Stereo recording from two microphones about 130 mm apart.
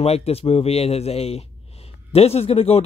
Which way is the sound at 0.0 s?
50° left (ahead or behind).